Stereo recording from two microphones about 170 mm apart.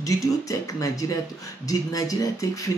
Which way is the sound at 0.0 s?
20° left (ahead or behind).